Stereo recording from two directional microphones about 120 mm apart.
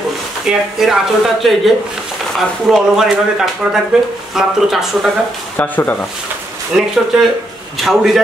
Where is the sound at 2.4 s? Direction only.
Centre (ahead or behind).